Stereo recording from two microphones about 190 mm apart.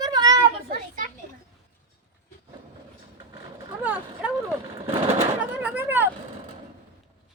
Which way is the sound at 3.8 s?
5° right (ahead or behind).